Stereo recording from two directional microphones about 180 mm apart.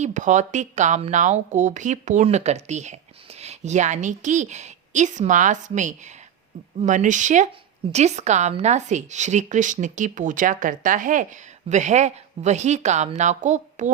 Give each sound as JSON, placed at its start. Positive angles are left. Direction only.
{"t": 0.0, "sound": "a woman's voice", "side_deg": -45}